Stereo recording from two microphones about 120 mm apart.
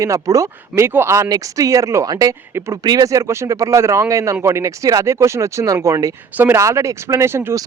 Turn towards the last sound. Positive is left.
turn(degrees=-20)  # may be behind; listen again after turning